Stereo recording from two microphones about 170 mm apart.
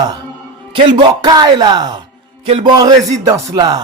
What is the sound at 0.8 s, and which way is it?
Speech, 30° right (ahead or behind).